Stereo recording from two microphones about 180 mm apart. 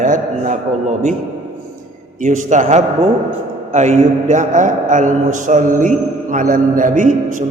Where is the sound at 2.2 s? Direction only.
45° right (ahead or behind).